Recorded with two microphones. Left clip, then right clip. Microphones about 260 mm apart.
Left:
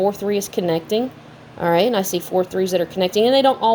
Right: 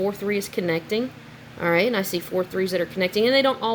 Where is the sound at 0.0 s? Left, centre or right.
Centre.